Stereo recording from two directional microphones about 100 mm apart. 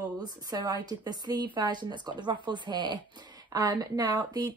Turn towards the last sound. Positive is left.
turn(degrees=-40)  # may be behind; listen again after turning